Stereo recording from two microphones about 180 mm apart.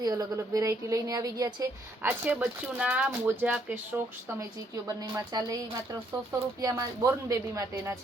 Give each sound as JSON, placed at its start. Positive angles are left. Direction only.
{"t": 0.0, "sound": "speech", "side_deg": -20}
{"t": 4.4, "sound": "speech", "side_deg": -20}